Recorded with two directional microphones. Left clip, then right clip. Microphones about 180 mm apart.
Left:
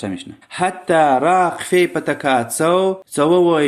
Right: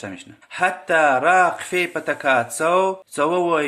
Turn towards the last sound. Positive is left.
turn(degrees=35)  # may be behind; listen again after turning